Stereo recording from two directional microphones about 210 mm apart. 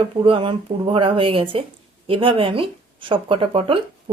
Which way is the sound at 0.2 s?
25° right (ahead or behind).